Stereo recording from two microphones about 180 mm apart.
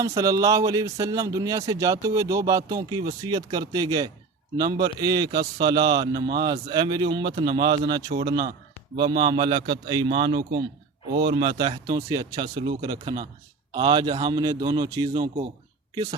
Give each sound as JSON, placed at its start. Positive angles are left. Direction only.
{"t": 0.0, "sound": "a man's voice", "side_deg": -20}